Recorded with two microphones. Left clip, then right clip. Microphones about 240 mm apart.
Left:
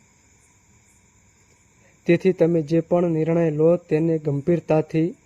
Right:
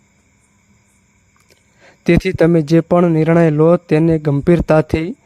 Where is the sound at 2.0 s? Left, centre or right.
Right.